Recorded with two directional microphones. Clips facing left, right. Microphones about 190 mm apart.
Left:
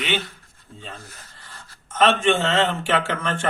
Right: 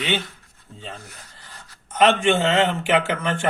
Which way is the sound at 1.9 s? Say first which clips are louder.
Right 1 dB; 20° right (ahead or behind).